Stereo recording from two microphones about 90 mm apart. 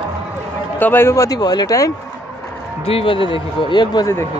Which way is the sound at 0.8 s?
20° left (ahead or behind).